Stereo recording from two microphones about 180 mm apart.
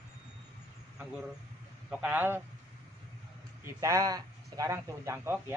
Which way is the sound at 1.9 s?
10° right (ahead or behind).